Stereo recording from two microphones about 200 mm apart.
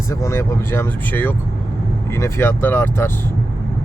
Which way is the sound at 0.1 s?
15° left (ahead or behind).